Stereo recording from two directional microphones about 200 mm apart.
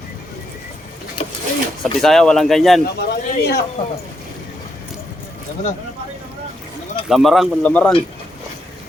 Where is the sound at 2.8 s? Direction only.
55° left (ahead or behind).